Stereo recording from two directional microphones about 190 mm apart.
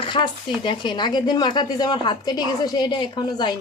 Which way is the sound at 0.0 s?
25° left (ahead or behind).